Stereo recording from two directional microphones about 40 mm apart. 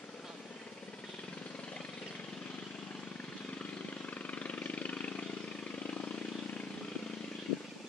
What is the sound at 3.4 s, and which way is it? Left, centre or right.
Vehicle, left.